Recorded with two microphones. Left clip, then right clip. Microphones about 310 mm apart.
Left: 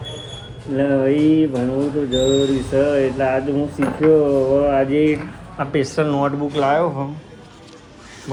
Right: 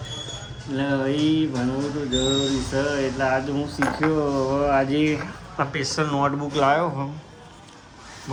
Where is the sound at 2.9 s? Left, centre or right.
Centre.